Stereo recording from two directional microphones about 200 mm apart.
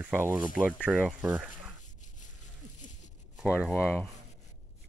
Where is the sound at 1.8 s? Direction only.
40° left (ahead or behind).